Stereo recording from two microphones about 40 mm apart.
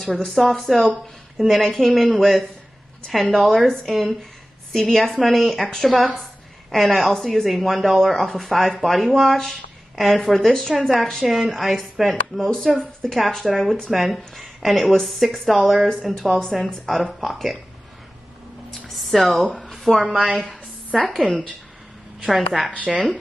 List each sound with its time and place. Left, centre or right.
0.0 s speech: centre
12.4 s speech: centre
13.1 s speech: centre
19.0 s speech: centre
20.3 s a sound: centre
21.1 s speech: centre
22.8 s speech: centre